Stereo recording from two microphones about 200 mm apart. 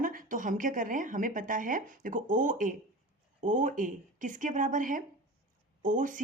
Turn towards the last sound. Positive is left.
turn(degrees=-40)  # may be behind; listen again after turning